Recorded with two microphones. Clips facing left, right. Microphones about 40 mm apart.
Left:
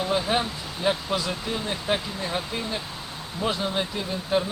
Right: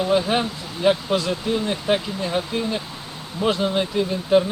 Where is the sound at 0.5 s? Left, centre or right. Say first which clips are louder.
Right 2 dB; left.